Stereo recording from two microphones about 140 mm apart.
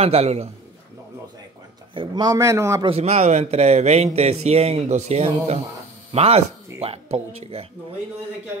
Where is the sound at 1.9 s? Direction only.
35° right (ahead or behind).